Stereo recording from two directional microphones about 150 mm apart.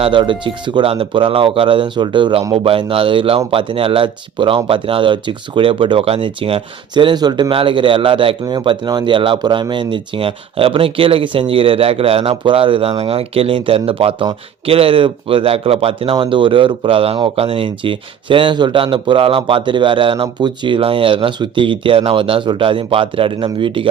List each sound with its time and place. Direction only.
0.0 s speech: 35° right (ahead or behind)